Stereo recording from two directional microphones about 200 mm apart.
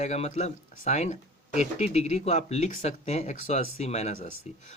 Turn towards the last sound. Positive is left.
turn(degrees=35)  # may be behind; listen again after turning